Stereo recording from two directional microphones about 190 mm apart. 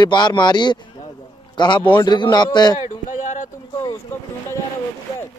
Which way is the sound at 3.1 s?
40° left (ahead or behind).